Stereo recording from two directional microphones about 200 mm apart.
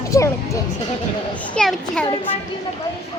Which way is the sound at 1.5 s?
5° left (ahead or behind).